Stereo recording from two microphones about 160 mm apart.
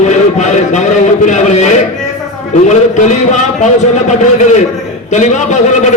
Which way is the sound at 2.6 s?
50° left (ahead or behind).